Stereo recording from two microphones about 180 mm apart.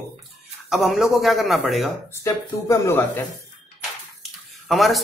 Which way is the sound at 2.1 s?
15° left (ahead or behind).